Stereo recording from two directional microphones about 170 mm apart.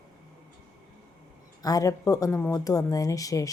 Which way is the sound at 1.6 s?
20° left (ahead or behind).